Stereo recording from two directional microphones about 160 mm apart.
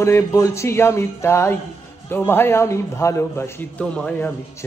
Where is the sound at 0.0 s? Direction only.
20° left (ahead or behind).